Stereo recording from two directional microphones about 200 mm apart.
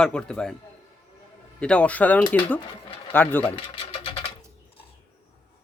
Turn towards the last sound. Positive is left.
turn(degrees=30)  # may be behind; listen again after turning